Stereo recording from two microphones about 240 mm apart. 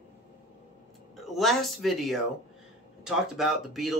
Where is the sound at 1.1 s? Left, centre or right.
Centre.